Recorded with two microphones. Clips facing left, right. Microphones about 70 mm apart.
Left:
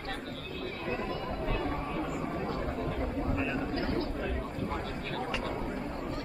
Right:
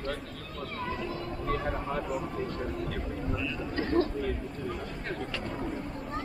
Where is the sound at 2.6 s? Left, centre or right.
Left.